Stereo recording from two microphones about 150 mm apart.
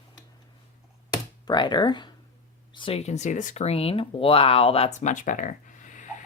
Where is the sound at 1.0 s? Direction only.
30° left (ahead or behind).